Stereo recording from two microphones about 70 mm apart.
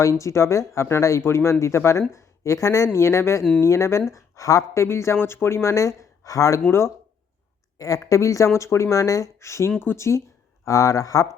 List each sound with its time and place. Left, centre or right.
0.0 s speech: left
6.7 s speech: left
7.8 s speech: left
10.7 s speech: left